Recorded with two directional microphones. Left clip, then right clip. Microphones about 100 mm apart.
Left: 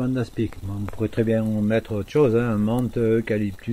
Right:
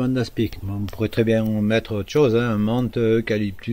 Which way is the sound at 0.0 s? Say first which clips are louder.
Right 3 dB; 20° right (ahead or behind).